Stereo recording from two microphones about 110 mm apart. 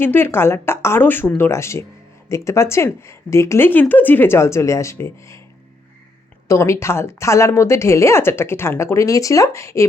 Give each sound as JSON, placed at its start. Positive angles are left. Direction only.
{"t": 0.0, "sound": "speech", "side_deg": 20}
{"t": 6.5, "sound": "speech", "side_deg": 25}